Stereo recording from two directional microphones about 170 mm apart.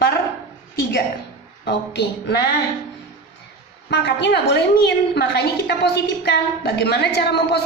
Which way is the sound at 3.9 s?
90° left.